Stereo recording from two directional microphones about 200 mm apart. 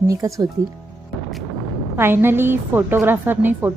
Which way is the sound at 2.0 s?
10° right (ahead or behind).